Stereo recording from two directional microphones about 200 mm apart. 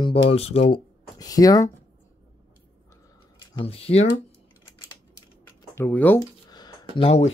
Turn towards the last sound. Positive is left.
turn(degrees=30)  # may be behind; listen again after turning